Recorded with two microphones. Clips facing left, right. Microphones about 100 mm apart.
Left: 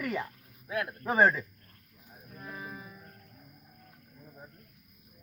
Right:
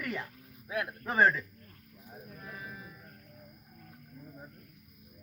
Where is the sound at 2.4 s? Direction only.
10° left (ahead or behind).